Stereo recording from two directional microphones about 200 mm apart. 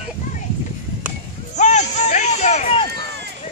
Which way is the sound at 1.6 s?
35° left (ahead or behind).